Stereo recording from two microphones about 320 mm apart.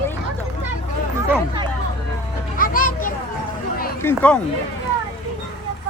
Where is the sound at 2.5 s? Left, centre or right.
Left.